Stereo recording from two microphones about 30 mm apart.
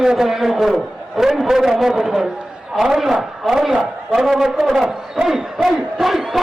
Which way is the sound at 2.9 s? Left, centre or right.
Centre.